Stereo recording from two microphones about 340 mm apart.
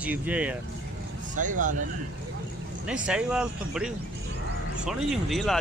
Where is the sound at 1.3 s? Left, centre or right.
Right.